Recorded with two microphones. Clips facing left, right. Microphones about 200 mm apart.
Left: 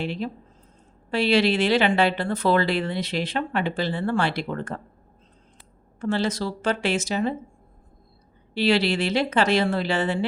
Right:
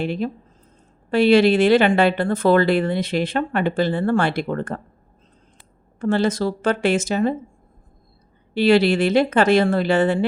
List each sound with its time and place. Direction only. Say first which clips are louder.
0.0 s speech: right 5 dB; 50° right (ahead or behind)
6.0 s speech: right 5 dB; 50° right (ahead or behind)
8.5 s speech: right 6 dB; 50° right (ahead or behind)